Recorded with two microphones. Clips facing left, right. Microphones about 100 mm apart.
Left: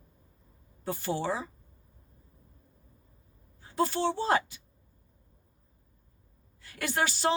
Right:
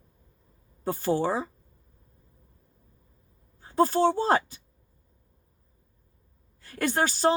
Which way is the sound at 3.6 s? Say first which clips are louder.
Right 6 dB; 40° right (ahead or behind).